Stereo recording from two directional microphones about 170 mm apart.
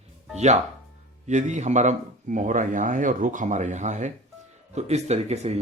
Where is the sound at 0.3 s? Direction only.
40° right (ahead or behind).